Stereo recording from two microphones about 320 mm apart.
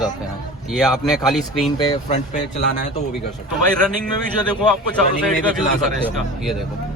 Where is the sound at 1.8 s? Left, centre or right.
Centre.